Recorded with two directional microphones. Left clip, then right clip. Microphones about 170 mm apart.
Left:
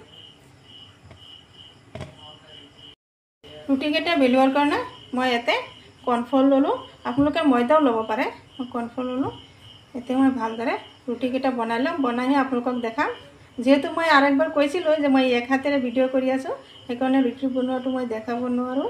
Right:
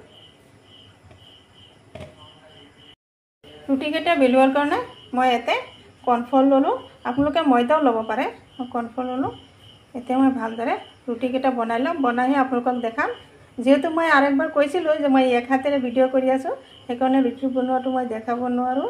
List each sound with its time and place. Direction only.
3.6 s a woman's voice: 5° right (ahead or behind)